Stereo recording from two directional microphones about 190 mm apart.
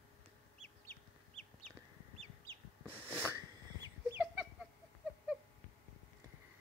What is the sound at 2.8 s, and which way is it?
Sneeze, 10° right (ahead or behind).